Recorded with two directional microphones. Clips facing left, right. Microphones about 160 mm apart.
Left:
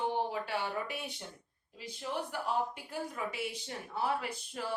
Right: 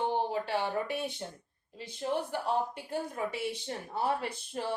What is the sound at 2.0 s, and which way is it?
Speech, 45° right (ahead or behind).